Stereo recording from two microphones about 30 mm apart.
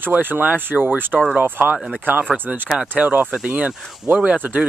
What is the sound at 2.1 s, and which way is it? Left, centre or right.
Speech, right.